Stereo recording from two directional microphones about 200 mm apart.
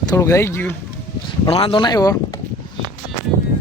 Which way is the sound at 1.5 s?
25° left (ahead or behind).